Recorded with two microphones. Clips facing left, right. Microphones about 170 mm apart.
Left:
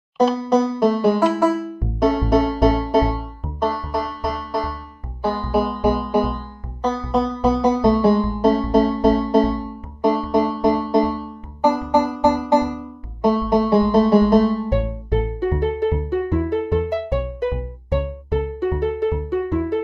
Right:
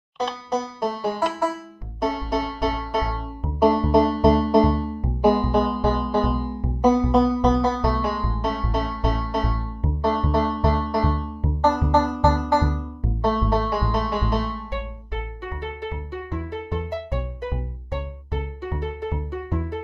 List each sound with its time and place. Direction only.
0.5 s music: 70° left (ahead or behind); by 2.8 s 45° left (ahead or behind)
2.8 s music: 30° left (ahead or behind)
3.6 s music: 20° right (ahead or behind)
5.5 s music: 5° left (ahead or behind)
6.8 s music: 10° right (ahead or behind)
7.1 s music: centre (ahead or behind)
7.6 s music: 15° left (ahead or behind)
9.6 s music: 15° left (ahead or behind)
13.7 s music: 25° left (ahead or behind); by 19.8 s 75° left (ahead or behind)